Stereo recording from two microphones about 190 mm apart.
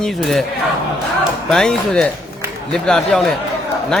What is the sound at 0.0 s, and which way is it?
Speech, centre (ahead or behind).